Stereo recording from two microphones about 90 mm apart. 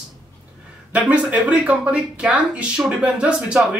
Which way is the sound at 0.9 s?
15° right (ahead or behind).